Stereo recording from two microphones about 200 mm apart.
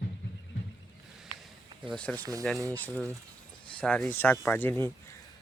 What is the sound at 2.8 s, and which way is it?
Speech, 5° left (ahead or behind).